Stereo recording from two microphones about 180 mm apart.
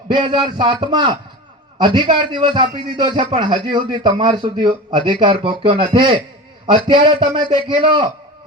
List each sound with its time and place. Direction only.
0.1 s speech: 25° right (ahead or behind)